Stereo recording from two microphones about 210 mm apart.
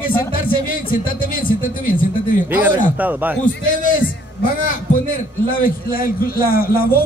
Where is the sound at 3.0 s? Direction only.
10° right (ahead or behind).